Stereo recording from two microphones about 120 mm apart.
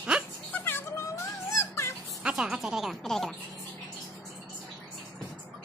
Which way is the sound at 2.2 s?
5° right (ahead or behind).